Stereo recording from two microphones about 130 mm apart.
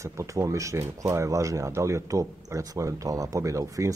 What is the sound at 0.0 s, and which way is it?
Speech, 25° right (ahead or behind).